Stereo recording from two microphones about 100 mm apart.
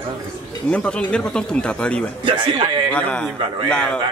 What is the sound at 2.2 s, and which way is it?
Speech, 55° right (ahead or behind).